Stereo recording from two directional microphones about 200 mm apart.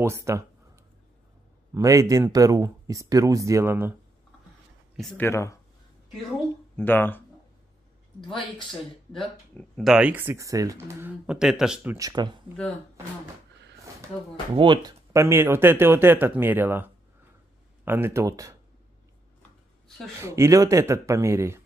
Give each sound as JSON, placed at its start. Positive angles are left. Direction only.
{"t": 0.0, "sound": "speech", "side_deg": -15}
{"t": 1.7, "sound": "speech", "side_deg": -15}
{"t": 4.9, "sound": "speech", "side_deg": 5}
{"t": 6.8, "sound": "speech", "side_deg": 10}
{"t": 9.1, "sound": "speech", "side_deg": 5}
{"t": 14.5, "sound": "speech", "side_deg": -25}
{"t": 20.2, "sound": "speech", "side_deg": -15}